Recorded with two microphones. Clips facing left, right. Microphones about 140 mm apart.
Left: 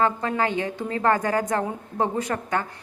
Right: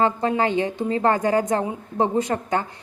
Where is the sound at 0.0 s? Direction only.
25° right (ahead or behind).